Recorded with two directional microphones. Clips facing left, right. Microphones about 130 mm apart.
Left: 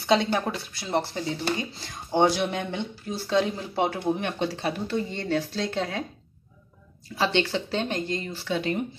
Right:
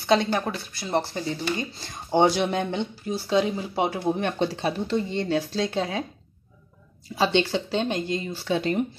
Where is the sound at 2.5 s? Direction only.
30° right (ahead or behind).